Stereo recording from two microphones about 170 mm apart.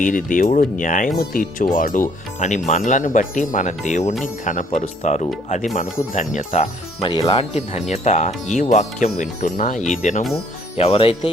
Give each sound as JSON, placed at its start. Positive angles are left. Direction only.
{"t": 0.0, "sound": "speech", "side_deg": 50}
{"t": 10.8, "sound": "speech", "side_deg": 35}